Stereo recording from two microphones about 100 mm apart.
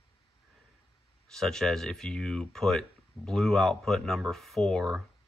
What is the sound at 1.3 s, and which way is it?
Speech, 5° left (ahead or behind).